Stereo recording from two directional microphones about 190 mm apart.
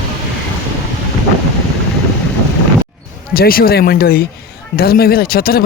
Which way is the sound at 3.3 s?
50° left (ahead or behind).